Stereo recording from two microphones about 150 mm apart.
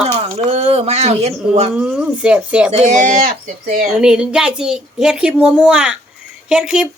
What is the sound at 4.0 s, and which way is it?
Speech, 5° right (ahead or behind).